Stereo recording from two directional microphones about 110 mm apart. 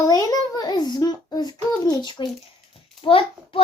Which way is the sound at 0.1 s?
35° left (ahead or behind).